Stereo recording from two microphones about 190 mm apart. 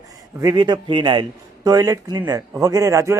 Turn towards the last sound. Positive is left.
turn(degrees=-15)  # may be behind; listen again after turning